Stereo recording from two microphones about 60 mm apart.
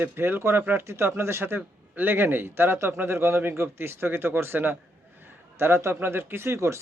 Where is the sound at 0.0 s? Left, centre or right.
Right.